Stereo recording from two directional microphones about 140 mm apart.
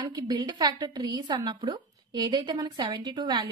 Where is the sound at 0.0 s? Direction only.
30° right (ahead or behind).